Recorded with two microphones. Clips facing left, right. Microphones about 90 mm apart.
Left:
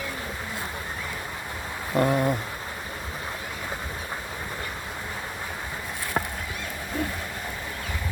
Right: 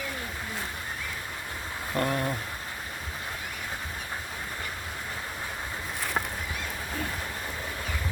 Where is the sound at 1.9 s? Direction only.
15° left (ahead or behind).